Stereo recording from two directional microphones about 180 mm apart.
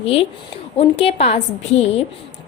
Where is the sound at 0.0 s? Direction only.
35° left (ahead or behind).